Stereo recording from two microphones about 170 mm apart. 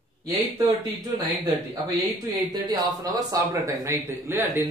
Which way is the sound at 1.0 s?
25° right (ahead or behind).